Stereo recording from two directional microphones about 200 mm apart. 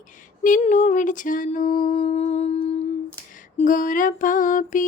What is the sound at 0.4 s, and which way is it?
Mantra, 40° left (ahead or behind).